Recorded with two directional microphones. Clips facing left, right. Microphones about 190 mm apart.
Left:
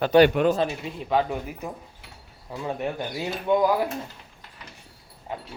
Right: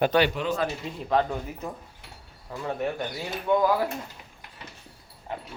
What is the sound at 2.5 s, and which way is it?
A man's voice, 20° left (ahead or behind).